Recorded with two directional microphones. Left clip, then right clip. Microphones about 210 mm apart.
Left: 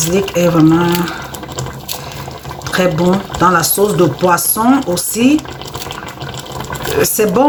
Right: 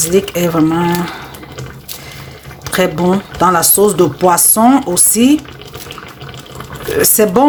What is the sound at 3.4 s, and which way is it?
Speech, 55° right (ahead or behind).